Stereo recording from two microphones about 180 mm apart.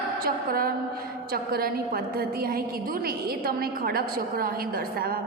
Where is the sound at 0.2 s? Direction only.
55° right (ahead or behind).